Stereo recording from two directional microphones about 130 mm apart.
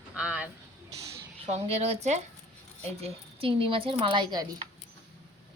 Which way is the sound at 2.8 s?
50° right (ahead or behind).